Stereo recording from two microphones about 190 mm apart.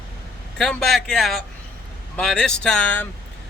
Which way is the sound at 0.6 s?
5° left (ahead or behind).